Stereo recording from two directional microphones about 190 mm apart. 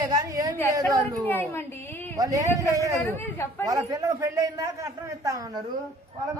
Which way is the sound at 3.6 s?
20° right (ahead or behind).